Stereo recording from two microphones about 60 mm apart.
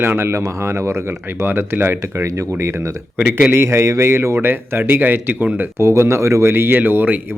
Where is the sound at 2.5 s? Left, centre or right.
Right.